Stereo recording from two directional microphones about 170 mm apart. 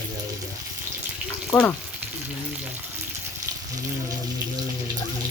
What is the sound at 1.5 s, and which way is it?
Speech, 15° left (ahead or behind).